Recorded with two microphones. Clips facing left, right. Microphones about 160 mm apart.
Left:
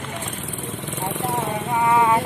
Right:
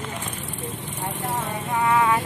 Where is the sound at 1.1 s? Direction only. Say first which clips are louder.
Left 4 dB; 75° left (ahead or behind).